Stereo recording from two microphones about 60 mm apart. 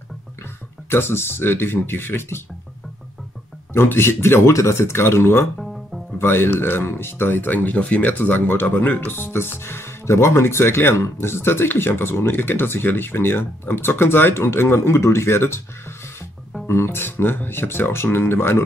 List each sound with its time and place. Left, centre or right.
0.8 s speech: left
3.7 s speech: left
4.5 s speech: left
9.1 s speech: left
16.6 s speech: left